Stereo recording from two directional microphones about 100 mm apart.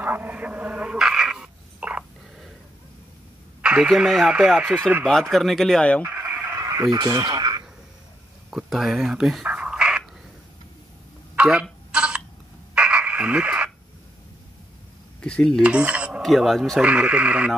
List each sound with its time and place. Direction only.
0.0 s a sound: 20° right (ahead or behind)
3.6 s radio: 10° right (ahead or behind)
3.9 s speech: centre (ahead or behind)
5.3 s speech: centre (ahead or behind)
6.0 s chicken: 20° right (ahead or behind)
6.5 s radio: 35° right (ahead or behind)
8.5 s a sound: 5° right (ahead or behind)
11.3 s a sound: 10° right (ahead or behind)
15.2 s cutlery: 10° left (ahead or behind)
15.6 s cutlery: 10° right (ahead or behind)
16.2 s speech: centre (ahead or behind)
16.8 s speech: 10° right (ahead or behind)